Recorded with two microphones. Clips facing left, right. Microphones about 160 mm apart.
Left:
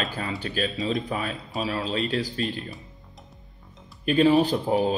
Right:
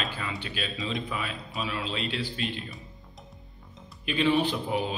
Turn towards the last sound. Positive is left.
turn(degrees=40)  # may be behind; listen again after turning